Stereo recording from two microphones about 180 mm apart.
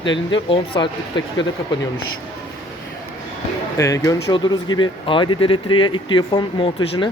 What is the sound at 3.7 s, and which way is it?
Speech, 15° left (ahead or behind).